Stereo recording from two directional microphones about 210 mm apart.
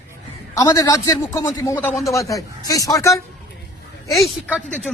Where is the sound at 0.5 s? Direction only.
15° left (ahead or behind).